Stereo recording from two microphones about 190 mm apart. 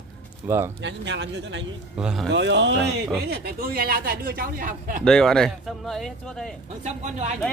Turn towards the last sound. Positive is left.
turn(degrees=-40)  # may be behind; listen again after turning